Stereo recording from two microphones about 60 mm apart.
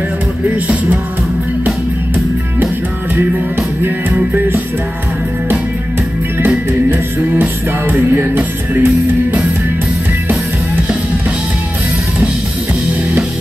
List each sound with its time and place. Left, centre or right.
4.3 s music: right
6.9 s music: right